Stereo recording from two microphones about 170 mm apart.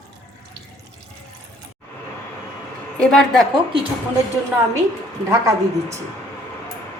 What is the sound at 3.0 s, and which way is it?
Speech, 5° left (ahead or behind).